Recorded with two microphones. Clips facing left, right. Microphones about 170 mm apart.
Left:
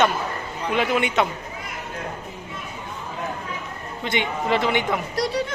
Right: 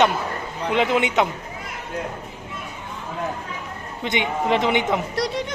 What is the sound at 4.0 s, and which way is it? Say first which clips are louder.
Speech: right 2 dB; 20° right (ahead or behind).